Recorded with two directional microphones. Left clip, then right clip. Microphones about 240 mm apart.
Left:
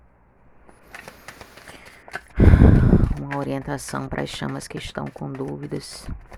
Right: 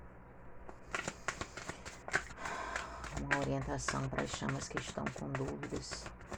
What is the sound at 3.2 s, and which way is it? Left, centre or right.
Speech, left.